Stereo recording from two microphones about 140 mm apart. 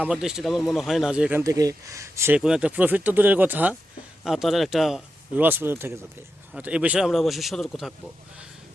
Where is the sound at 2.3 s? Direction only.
5° right (ahead or behind).